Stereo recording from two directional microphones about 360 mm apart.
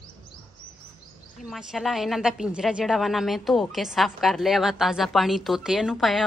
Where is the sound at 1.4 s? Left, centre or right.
Centre.